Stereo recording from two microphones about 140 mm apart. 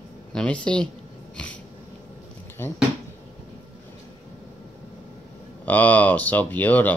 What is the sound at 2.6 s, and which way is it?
Speech, 15° left (ahead or behind).